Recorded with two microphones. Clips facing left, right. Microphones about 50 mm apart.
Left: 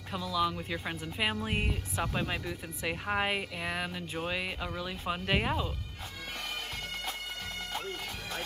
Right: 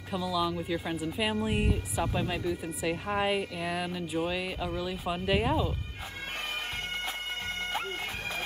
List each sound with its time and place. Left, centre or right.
0.2 s speech: centre
1.3 s speech: left
2.1 s speech: centre
7.8 s speech: right